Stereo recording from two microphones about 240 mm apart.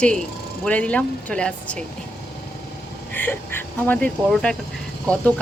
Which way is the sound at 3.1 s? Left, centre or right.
Centre.